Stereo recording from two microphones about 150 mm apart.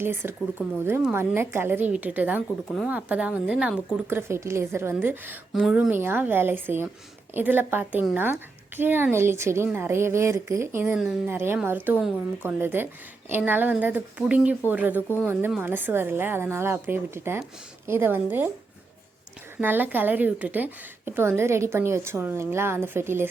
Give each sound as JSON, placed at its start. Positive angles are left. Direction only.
{"t": 0.0, "sound": "a woman's voice", "side_deg": -15}
{"t": 5.6, "sound": "speech", "side_deg": 0}
{"t": 5.9, "sound": "a woman's voice", "side_deg": -15}
{"t": 19.5, "sound": "a woman's voice", "side_deg": -15}